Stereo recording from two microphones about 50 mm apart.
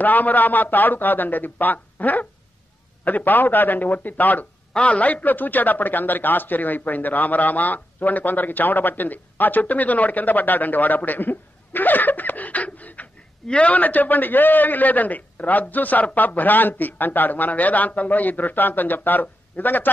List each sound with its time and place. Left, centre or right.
0.0 s a man's voice: left